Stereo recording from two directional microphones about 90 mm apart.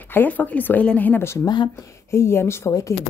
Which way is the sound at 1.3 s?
50° left (ahead or behind).